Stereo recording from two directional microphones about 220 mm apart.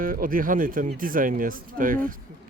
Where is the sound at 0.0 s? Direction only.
40° right (ahead or behind).